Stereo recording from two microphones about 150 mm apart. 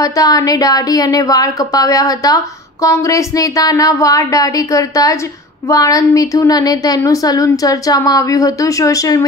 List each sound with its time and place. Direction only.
0.0 s speech: 25° left (ahead or behind)